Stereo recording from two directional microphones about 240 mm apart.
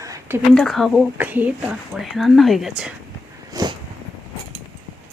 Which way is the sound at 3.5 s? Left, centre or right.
Centre.